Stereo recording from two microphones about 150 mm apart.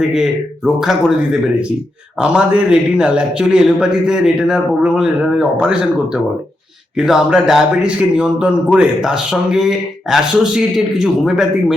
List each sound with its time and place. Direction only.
0.1 s speech: centre (ahead or behind)